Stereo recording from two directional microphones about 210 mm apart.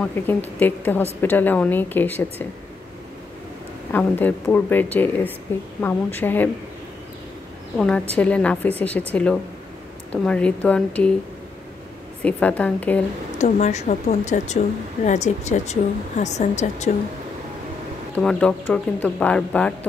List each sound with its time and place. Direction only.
0.0 s speech: 10° left (ahead or behind)
3.9 s speech: 10° left (ahead or behind)
7.7 s a woman's voice: 5° left (ahead or behind)
12.2 s speech: 5° left (ahead or behind)
13.4 s speech: 35° left (ahead or behind)
18.1 s speech: 5° left (ahead or behind)